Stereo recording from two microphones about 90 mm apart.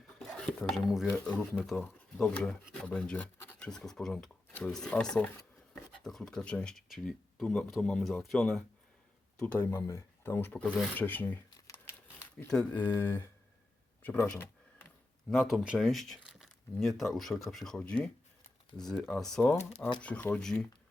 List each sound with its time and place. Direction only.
0.3 s speech: 5° left (ahead or behind)
1.0 s speech: 15° left (ahead or behind)
6.9 s speech: centre (ahead or behind)
9.4 s speech: 15° left (ahead or behind)
9.8 s speech: 25° left (ahead or behind)
12.5 s speech: 10° left (ahead or behind)
12.8 s speech: 25° left (ahead or behind)
14.3 s a sound: 25° left (ahead or behind)
15.3 s speech: 5° right (ahead or behind)
19.4 s speech: 15° left (ahead or behind)